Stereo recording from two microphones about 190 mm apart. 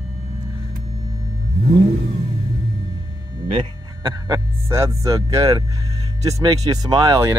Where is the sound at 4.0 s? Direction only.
15° right (ahead or behind).